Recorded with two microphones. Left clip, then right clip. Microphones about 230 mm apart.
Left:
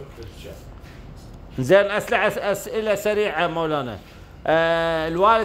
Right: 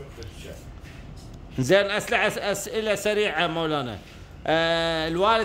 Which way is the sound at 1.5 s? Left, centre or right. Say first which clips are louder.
Left 4 dB; right.